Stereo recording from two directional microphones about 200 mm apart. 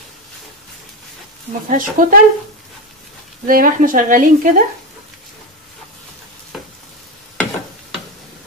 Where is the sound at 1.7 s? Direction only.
40° right (ahead or behind).